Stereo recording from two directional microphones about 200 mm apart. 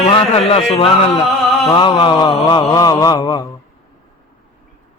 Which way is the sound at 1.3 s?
Centre (ahead or behind).